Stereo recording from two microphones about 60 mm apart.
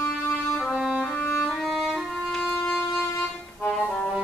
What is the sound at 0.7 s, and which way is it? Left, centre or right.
Music, centre.